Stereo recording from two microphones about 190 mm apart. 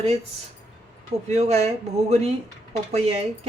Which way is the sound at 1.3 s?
35° right (ahead or behind).